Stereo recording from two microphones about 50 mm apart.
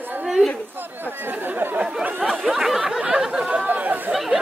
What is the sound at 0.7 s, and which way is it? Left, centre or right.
Speech, right.